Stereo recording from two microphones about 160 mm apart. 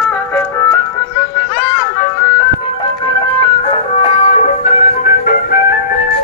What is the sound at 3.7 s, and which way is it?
Music, 35° left (ahead or behind).